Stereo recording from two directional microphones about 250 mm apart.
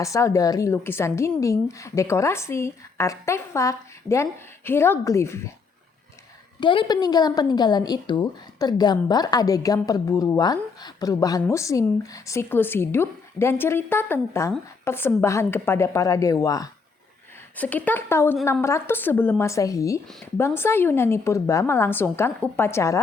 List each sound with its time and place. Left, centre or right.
0.0 s a woman's voice: centre
6.6 s a woman's voice: centre